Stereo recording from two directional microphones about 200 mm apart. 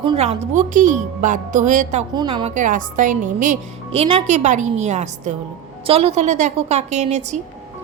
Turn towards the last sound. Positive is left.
turn(degrees=-35)  # may be behind; listen again after turning